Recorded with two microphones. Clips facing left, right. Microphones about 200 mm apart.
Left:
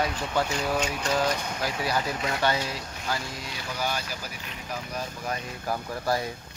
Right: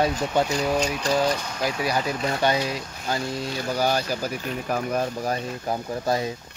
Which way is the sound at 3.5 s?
40° right (ahead or behind).